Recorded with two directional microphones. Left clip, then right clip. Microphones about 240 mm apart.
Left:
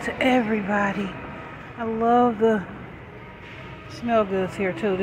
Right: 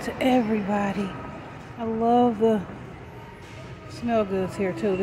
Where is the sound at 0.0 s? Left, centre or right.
Centre.